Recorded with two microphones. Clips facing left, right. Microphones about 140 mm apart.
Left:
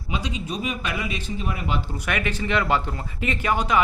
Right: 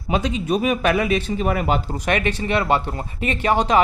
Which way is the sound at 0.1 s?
50° right (ahead or behind).